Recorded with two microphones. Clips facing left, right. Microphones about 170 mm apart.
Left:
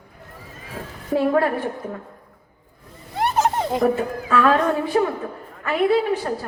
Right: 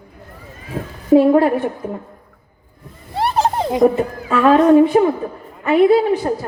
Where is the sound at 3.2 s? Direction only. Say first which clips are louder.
Right 3 dB; 30° right (ahead or behind).